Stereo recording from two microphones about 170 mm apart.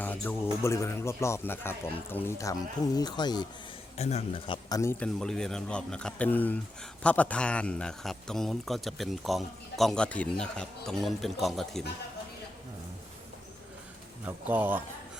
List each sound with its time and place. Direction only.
0.0 s music: 10° left (ahead or behind)
0.6 s a man's voice: 15° left (ahead or behind)
3.9 s speech: 40° left (ahead or behind)
4.8 s speech: 10° left (ahead or behind)
14.3 s speech: 10° right (ahead or behind)